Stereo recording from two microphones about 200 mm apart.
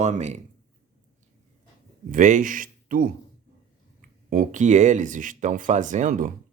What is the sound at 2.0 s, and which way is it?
Speech, 40° right (ahead or behind).